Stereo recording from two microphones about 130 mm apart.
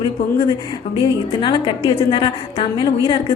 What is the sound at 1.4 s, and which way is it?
A woman's voice, 40° left (ahead or behind).